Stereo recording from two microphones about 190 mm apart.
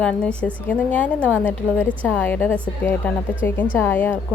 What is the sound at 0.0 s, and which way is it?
A woman's voice, 5° left (ahead or behind).